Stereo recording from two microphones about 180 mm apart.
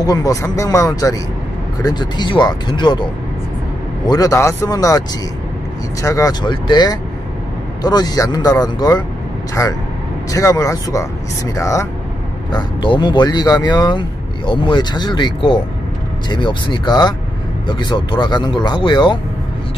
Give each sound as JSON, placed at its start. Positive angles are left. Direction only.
{"t": 0.0, "sound": "speech", "side_deg": 20}
{"t": 6.0, "sound": "a man's voice", "side_deg": 20}